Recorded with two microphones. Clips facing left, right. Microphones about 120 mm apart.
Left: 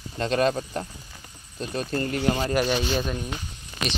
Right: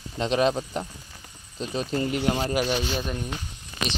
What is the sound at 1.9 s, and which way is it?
Speech, 10° right (ahead or behind).